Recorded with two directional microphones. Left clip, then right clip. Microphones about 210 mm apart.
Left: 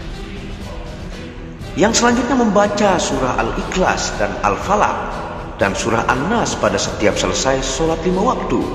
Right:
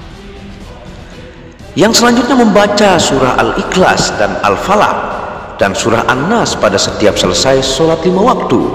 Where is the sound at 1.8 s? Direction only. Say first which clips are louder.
Right 6 dB; 35° right (ahead or behind).